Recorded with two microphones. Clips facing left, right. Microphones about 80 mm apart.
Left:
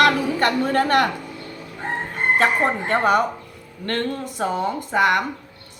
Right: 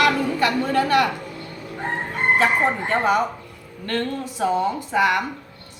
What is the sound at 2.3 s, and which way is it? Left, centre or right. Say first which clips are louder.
A woman's voice: left 1 dB; left.